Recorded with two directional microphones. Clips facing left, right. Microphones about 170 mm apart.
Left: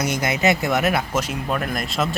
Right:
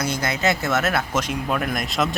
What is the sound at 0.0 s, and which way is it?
A man's voice, 20° left (ahead or behind).